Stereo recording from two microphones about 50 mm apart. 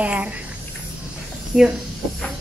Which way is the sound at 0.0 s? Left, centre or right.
Right.